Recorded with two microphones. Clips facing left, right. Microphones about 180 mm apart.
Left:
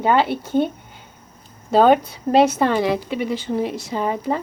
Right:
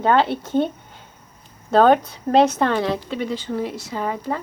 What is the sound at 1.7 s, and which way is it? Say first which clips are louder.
A woman's voice: left 1 dB; 10° left (ahead or behind).